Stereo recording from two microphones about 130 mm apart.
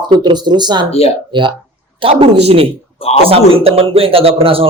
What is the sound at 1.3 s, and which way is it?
Speech, 40° right (ahead or behind).